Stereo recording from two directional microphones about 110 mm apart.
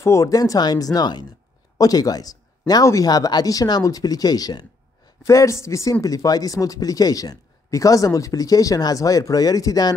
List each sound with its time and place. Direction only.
0.0 s speech: 25° left (ahead or behind)